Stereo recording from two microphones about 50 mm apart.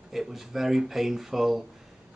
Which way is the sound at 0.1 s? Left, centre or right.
Centre.